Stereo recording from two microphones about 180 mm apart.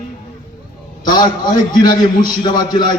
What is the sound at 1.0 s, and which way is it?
A man's voice, 20° left (ahead or behind).